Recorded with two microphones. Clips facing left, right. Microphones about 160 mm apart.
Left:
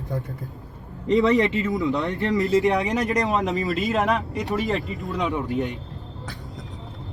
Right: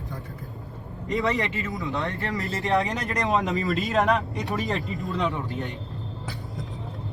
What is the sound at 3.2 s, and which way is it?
Speech, centre (ahead or behind).